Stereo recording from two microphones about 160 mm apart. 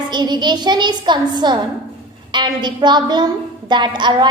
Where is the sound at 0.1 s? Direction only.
25° right (ahead or behind).